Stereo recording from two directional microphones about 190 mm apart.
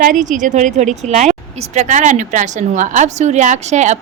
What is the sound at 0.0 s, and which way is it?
A woman's voice, 40° right (ahead or behind).